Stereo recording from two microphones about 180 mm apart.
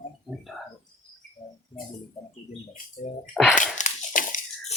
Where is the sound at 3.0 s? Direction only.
40° left (ahead or behind).